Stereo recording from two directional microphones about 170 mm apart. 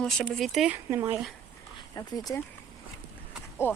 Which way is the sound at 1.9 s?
20° left (ahead or behind).